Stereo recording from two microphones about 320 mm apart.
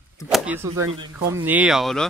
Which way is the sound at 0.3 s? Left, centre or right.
Centre.